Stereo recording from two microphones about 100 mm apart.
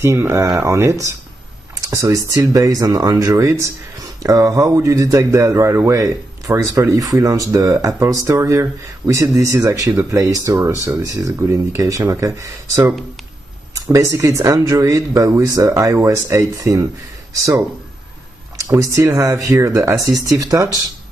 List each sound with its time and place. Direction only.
0.0 s speech: 25° right (ahead or behind)
13.9 s speech: 30° right (ahead or behind)